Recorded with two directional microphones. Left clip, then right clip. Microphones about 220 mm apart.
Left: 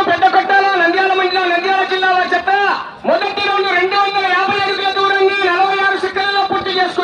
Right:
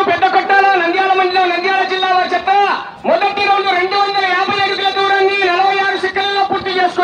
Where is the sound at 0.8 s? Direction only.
10° right (ahead or behind).